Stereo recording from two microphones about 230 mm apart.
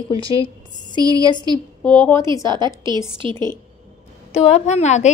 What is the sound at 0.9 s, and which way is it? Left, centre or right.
A woman's voice, centre.